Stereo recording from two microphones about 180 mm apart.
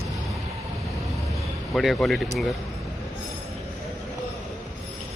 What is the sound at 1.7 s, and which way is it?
Speech, centre (ahead or behind).